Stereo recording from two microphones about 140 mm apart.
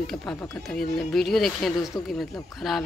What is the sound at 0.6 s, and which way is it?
Speech, 5° left (ahead or behind).